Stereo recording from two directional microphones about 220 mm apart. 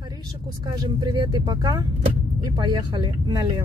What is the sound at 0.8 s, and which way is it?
Speech, 20° right (ahead or behind).